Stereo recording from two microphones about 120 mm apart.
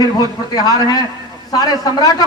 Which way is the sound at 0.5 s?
35° left (ahead or behind).